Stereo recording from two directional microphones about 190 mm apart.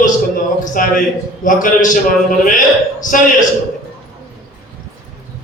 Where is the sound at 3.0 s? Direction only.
40° left (ahead or behind).